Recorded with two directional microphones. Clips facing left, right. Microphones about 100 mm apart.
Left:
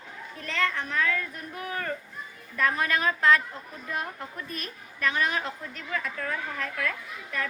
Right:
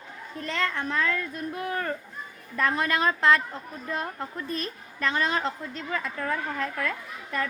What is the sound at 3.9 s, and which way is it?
A woman's voice, 30° right (ahead or behind).